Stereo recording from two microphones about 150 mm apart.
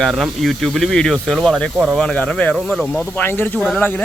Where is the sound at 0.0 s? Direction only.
Centre (ahead or behind).